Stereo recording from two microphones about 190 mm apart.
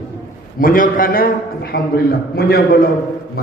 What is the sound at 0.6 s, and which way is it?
A man's voice, 45° left (ahead or behind).